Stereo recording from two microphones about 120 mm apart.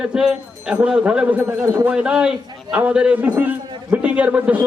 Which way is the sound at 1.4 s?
25° right (ahead or behind).